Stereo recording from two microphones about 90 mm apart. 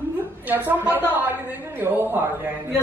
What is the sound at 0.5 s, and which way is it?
A woman's voice, 20° right (ahead or behind).